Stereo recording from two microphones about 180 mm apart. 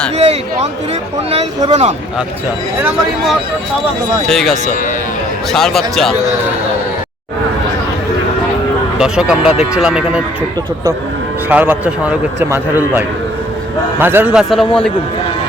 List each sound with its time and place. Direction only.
0.2 s speech: 35° right (ahead or behind)
4.3 s speech: centre (ahead or behind)
9.0 s speech: 5° right (ahead or behind)
11.4 s a man's voice: 10° right (ahead or behind)